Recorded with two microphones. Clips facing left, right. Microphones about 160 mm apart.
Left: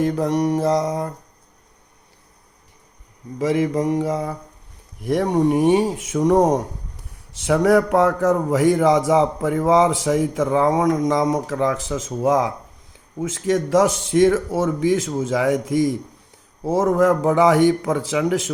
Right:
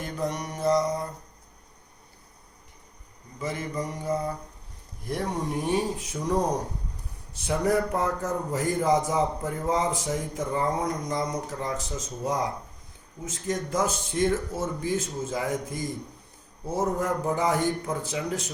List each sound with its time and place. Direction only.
0.2 s a man's voice: 90° left
3.3 s mantra: 90° left
5.0 s speech: 70° left (ahead or behind)
7.4 s a man's voice: 90° left